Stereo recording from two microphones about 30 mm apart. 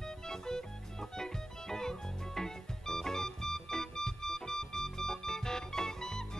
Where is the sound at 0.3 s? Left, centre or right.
Centre.